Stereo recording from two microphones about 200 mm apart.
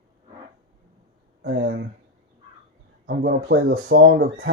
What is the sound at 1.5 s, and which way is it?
Speech, 60° right (ahead or behind).